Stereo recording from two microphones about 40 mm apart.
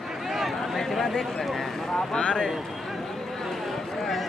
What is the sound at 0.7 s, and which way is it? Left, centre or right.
Speech, centre.